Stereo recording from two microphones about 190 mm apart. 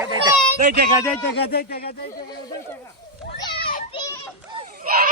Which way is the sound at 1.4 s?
55° left (ahead or behind).